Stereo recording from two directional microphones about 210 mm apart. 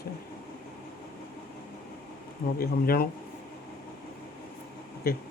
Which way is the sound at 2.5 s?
45° left (ahead or behind).